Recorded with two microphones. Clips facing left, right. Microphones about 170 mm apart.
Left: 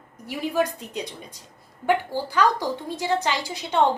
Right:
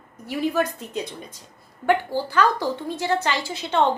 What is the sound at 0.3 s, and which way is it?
Speech, 15° left (ahead or behind).